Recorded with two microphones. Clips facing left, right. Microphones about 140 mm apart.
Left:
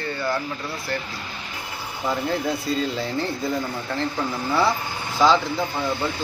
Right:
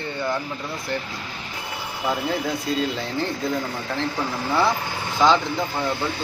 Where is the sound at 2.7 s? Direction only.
Centre (ahead or behind).